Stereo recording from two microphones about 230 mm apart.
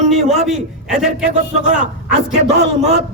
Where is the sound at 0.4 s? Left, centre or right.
Centre.